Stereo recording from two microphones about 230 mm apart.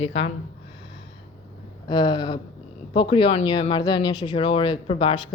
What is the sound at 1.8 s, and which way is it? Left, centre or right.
Speech, centre.